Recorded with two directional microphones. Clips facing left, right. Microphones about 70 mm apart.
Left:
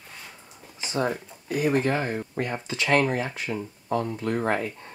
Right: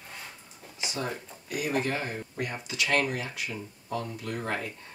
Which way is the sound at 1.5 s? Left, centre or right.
Left.